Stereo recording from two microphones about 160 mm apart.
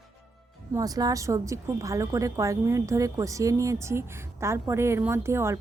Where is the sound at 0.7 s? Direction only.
25° right (ahead or behind).